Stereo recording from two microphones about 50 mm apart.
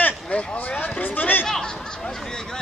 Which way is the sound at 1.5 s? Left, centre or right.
Centre.